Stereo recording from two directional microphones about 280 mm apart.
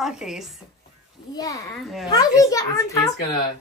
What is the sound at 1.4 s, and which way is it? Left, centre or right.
A child's voice, centre.